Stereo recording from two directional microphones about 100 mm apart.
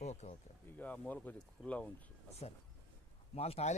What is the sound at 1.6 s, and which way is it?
Speech, centre (ahead or behind).